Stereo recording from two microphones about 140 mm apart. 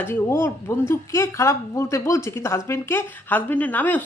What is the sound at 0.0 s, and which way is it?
A woman's voice, 15° left (ahead or behind).